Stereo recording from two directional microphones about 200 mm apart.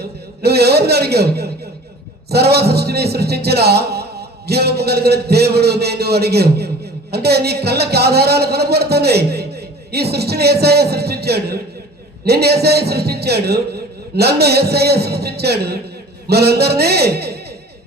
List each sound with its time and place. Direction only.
0.0 s a man's voice: 55° right (ahead or behind)